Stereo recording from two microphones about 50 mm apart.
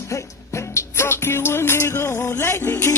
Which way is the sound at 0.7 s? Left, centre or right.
Left.